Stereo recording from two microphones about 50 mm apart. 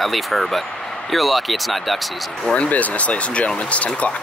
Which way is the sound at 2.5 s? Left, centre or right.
Left.